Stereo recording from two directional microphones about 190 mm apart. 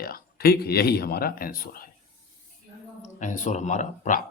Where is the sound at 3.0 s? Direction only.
40° left (ahead or behind).